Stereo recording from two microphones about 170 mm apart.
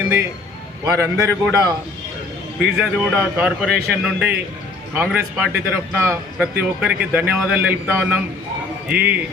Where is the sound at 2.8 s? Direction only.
5° right (ahead or behind).